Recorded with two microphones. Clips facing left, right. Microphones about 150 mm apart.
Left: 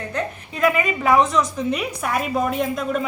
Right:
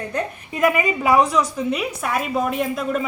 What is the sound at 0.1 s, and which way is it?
A woman's voice, 15° right (ahead or behind).